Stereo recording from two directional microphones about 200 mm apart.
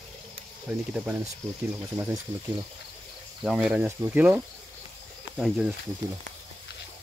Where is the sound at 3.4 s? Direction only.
5° right (ahead or behind).